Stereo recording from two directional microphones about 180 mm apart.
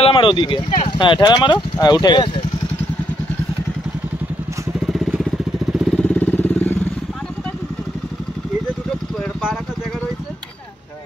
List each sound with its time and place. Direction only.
0.0 s speech: 30° left (ahead or behind)
4.8 s vehicle: centre (ahead or behind)